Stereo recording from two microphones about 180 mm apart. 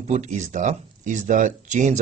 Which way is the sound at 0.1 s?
40° right (ahead or behind).